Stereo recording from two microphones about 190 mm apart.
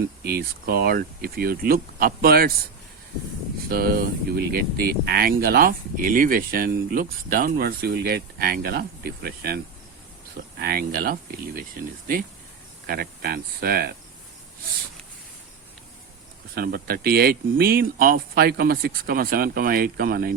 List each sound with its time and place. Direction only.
0.3 s speech: 50° right (ahead or behind)
3.7 s speech: 50° right (ahead or behind)
10.6 s speech: 50° right (ahead or behind)
12.9 s speech: 55° right (ahead or behind)
16.6 s speech: 55° right (ahead or behind)